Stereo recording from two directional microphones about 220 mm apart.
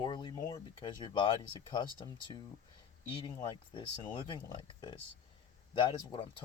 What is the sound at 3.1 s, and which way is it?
Speech, 25° left (ahead or behind).